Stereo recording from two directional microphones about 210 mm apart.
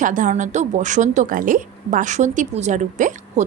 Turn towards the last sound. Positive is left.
turn(degrees=-35)  # may be behind; listen again after turning